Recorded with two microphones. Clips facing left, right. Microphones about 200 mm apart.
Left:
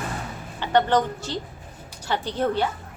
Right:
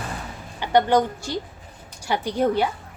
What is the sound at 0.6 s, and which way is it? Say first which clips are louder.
A woman's voice: right 2 dB; 10° right (ahead or behind).